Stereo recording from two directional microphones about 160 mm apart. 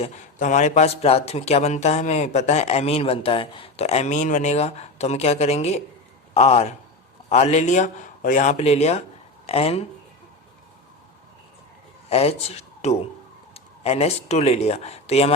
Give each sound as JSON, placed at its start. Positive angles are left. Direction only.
{"t": 0.0, "sound": "a man's voice", "side_deg": 50}
{"t": 12.0, "sound": "speech", "side_deg": 40}